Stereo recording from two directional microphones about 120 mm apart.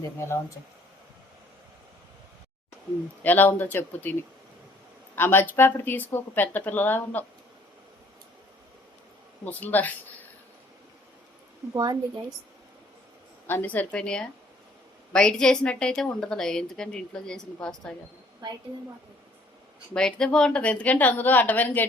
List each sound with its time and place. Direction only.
3.2 s speech: 15° left (ahead or behind)
5.1 s speech: 20° left (ahead or behind)
9.4 s speech: 15° left (ahead or behind)
11.7 s a woman's voice: 35° right (ahead or behind)
13.5 s a woman's voice: 15° left (ahead or behind)
19.9 s speech: 5° left (ahead or behind)